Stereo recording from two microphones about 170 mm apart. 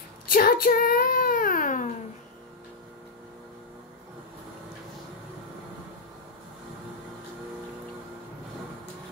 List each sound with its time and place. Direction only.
0.3 s cat: 55° left (ahead or behind)